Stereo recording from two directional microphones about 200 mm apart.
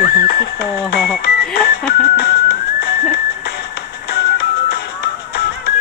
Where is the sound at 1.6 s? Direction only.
55° left (ahead or behind).